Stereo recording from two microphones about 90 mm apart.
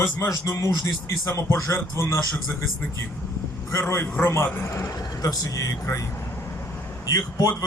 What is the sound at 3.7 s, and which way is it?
A man's voice, 30° left (ahead or behind).